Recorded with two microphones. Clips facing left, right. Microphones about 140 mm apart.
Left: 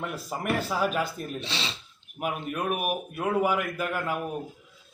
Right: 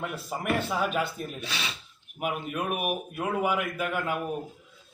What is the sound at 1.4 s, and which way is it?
Speech, 25° left (ahead or behind).